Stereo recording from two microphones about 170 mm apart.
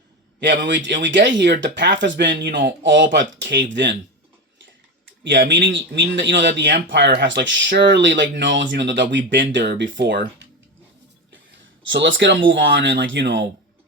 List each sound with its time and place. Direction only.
0.3 s a man's voice: 85° right
5.5 s speech: 90° right
11.9 s speech: 90° right